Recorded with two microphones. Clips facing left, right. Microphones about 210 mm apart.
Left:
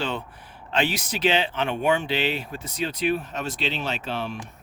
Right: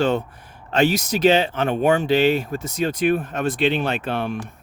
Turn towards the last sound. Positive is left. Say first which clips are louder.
# right 6 dB
turn(degrees=-55)  # may be behind; listen again after turning